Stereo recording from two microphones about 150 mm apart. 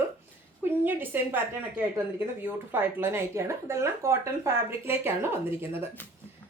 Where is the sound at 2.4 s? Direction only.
15° right (ahead or behind).